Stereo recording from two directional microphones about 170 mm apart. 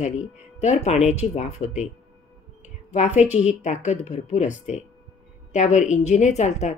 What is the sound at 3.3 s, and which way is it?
A woman's voice, 45° left (ahead or behind).